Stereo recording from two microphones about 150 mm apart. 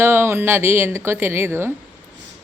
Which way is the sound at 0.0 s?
15° right (ahead or behind).